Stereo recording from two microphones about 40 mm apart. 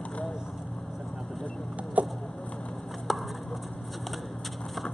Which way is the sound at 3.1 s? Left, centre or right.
Centre.